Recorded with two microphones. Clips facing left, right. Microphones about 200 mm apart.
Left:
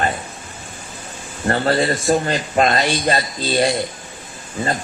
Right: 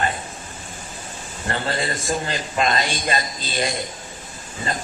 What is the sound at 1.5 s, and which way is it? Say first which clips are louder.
A man's voice: left 8 dB; 45° left (ahead or behind).